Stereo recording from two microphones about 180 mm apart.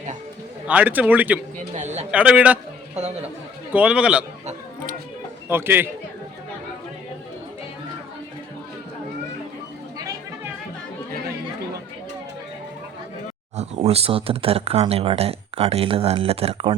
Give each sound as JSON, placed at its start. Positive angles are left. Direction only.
{"t": 0.7, "sound": "speech", "side_deg": -10}
{"t": 1.7, "sound": "speech", "side_deg": -40}
{"t": 2.0, "sound": "speech", "side_deg": -5}
{"t": 3.7, "sound": "a man's voice", "side_deg": -5}
{"t": 5.5, "sound": "speech", "side_deg": -10}
{"t": 13.6, "sound": "speech", "side_deg": -35}